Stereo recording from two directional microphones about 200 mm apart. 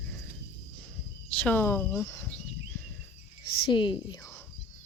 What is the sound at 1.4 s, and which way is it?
Speech, 10° left (ahead or behind).